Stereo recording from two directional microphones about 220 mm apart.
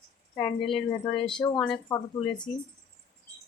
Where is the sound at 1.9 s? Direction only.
15° left (ahead or behind).